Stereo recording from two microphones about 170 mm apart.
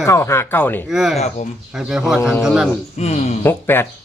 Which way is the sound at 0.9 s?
5° right (ahead or behind).